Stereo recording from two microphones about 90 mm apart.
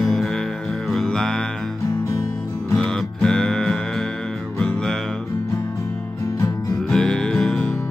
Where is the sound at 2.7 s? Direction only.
10° left (ahead or behind).